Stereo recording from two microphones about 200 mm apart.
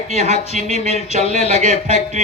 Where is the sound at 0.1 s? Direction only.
35° right (ahead or behind).